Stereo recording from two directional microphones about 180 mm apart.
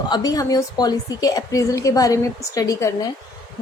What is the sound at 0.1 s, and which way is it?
A woman's voice, 20° left (ahead or behind).